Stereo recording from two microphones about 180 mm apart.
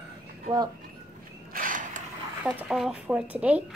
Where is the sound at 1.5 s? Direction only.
50° right (ahead or behind).